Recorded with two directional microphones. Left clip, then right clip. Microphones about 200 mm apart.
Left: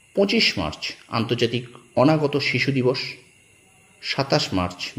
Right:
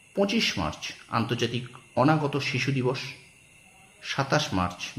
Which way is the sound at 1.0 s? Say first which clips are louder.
Left 5 dB; 10° left (ahead or behind).